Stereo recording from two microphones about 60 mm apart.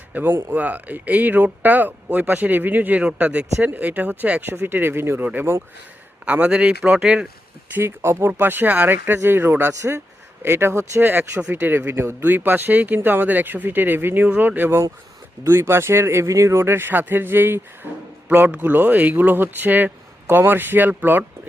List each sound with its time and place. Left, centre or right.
0.3 s speech: right
0.5 s speech: right
5.2 s a man's voice: right; by 7.3 s centre
7.7 s speech: right
9.1 s speech: right
15.4 s speech: right